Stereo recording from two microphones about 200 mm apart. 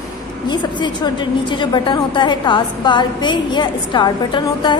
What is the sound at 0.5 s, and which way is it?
A woman's voice, 20° left (ahead or behind).